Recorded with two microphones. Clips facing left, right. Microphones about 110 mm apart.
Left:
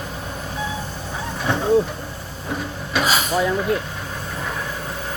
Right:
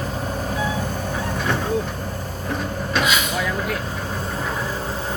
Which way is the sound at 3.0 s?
35° left (ahead or behind).